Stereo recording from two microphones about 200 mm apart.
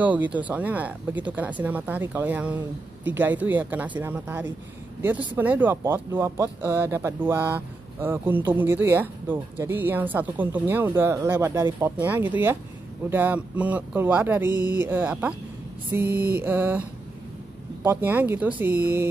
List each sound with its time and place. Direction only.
0.0 s speech: 5° right (ahead or behind)
14.5 s speech: 20° left (ahead or behind)
14.8 s speech: 10° right (ahead or behind)
17.8 s speech: 10° right (ahead or behind)